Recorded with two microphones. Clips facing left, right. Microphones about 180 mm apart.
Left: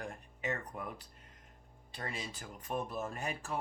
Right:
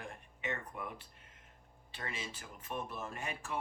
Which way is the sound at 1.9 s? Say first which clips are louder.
Left 2 dB; 40° left (ahead or behind).